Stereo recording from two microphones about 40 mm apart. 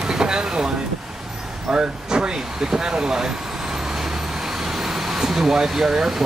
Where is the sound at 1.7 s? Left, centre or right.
Right.